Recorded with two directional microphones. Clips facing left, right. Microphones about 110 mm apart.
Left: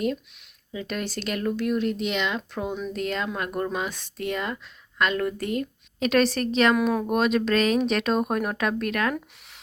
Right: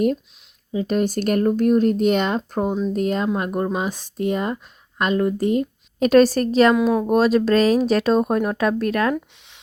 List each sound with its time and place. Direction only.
0.7 s speech: 35° right (ahead or behind)
3.2 s speech: 25° right (ahead or behind)
3.8 s speech: 40° right (ahead or behind)
5.1 s speech: 25° right (ahead or behind)
6.0 s speech: 40° right (ahead or behind)